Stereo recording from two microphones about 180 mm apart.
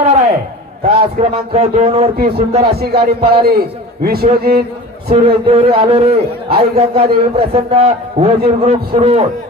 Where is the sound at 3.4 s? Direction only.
60° right (ahead or behind).